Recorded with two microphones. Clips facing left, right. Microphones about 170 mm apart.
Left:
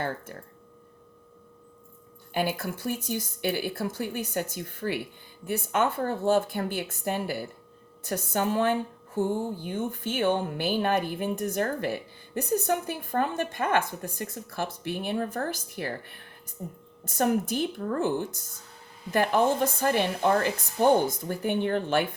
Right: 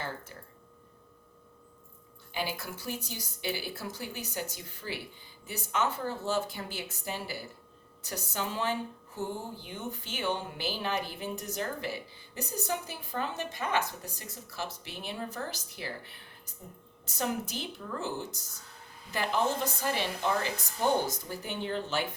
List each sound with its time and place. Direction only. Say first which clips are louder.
2.3 s speech: left 7 dB; 55° left (ahead or behind)